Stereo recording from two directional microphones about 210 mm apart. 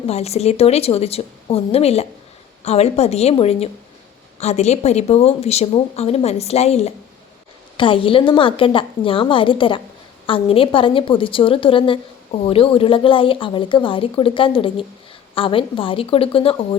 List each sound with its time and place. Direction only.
0.1 s a woman's voice: 30° left (ahead or behind)